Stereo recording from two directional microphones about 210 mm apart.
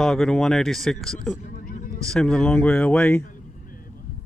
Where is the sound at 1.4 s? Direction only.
40° left (ahead or behind).